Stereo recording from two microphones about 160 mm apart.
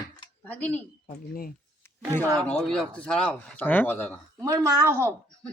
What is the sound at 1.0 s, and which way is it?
Speech, 65° left (ahead or behind).